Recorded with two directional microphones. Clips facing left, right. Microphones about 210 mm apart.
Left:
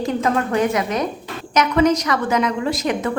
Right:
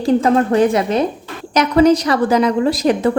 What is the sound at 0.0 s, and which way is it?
A woman's voice, 30° right (ahead or behind).